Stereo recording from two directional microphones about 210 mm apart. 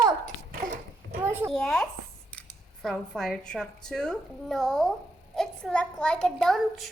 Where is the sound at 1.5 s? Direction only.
Centre (ahead or behind).